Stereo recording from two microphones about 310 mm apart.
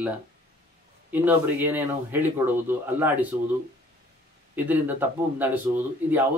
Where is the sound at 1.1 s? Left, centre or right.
Centre.